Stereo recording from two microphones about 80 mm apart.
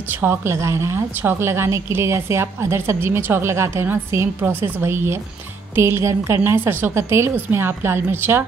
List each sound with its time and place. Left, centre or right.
0.2 s a woman's voice: right